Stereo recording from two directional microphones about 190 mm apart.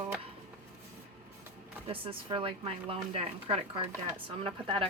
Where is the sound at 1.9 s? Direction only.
30° right (ahead or behind).